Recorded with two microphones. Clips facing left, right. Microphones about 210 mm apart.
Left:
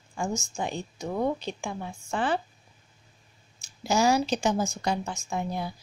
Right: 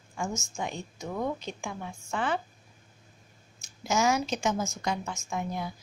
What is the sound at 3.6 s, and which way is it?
A woman's voice, 35° left (ahead or behind).